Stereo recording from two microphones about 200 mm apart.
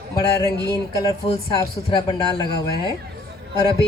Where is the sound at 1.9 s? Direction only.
20° left (ahead or behind).